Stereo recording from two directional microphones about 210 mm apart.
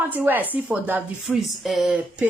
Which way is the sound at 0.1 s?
10° right (ahead or behind).